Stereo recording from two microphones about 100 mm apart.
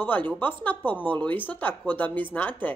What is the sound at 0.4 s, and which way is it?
A woman's voice, 20° left (ahead or behind).